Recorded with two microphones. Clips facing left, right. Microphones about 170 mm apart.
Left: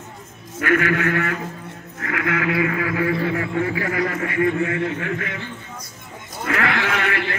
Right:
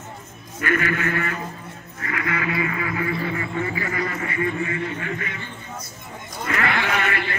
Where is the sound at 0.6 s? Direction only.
80° left.